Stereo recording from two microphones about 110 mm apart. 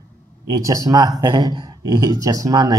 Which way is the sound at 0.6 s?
35° right (ahead or behind).